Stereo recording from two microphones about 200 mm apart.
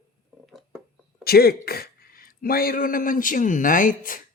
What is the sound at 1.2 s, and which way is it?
A man's voice, 50° left (ahead or behind).